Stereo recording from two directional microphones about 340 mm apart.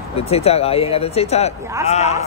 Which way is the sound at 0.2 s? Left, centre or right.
Centre.